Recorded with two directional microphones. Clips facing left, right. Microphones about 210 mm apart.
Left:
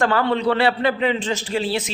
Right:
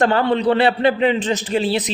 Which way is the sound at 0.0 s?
20° right (ahead or behind).